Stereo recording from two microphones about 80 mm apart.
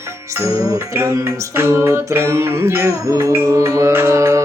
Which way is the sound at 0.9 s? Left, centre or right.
Right.